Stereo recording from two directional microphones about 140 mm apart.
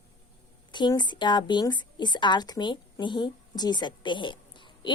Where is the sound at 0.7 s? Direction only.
30° left (ahead or behind).